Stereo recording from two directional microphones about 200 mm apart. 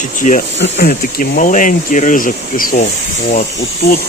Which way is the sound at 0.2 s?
40° left (ahead or behind).